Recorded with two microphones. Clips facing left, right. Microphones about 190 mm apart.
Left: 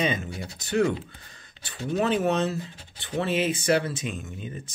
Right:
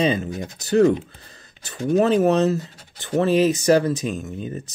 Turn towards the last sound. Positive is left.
turn(degrees=-40)  # may be behind; listen again after turning